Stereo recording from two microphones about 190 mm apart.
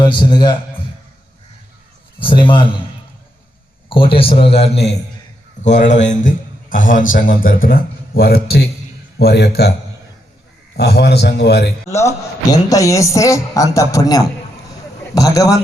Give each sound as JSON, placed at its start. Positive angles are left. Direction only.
{"t": 0.0, "sound": "a man's voice", "side_deg": 25}
{"t": 2.1, "sound": "a man's voice", "side_deg": 25}
{"t": 3.8, "sound": "a man's voice", "side_deg": 25}
{"t": 10.8, "sound": "a man's voice", "side_deg": 60}
{"t": 11.9, "sound": "a man's voice", "side_deg": 15}